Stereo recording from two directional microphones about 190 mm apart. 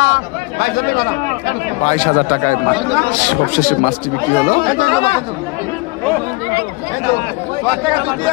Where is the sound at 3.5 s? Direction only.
50° left (ahead or behind).